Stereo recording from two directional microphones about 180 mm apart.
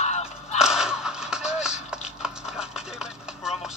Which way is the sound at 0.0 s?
40° left (ahead or behind).